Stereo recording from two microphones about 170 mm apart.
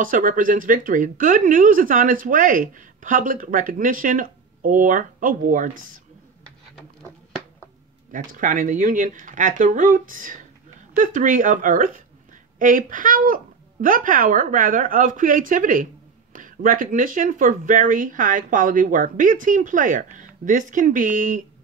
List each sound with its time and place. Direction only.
0.0 s speech: 55° right (ahead or behind)
8.1 s speech: 50° right (ahead or behind)